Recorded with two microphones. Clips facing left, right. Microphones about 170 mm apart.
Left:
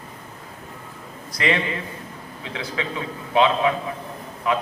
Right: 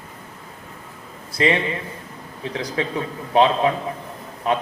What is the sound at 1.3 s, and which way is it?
Speech, 25° right (ahead or behind).